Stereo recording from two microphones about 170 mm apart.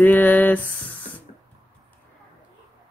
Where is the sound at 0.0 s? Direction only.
10° left (ahead or behind).